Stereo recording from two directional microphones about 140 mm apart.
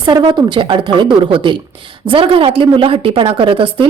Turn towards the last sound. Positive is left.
turn(degrees=-40)  # may be behind; listen again after turning